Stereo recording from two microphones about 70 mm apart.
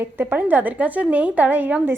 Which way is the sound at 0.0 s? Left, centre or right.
Right.